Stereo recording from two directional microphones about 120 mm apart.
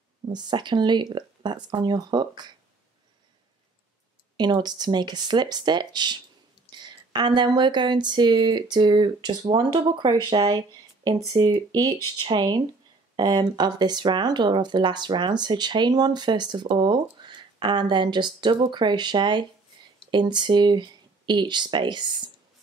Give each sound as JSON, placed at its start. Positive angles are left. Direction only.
{"t": 0.3, "sound": "speech", "side_deg": -40}
{"t": 4.4, "sound": "speech", "side_deg": -35}